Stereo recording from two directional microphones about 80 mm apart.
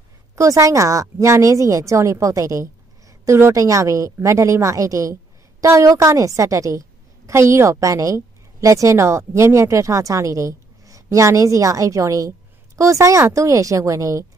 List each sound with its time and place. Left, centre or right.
0.4 s a woman's voice: right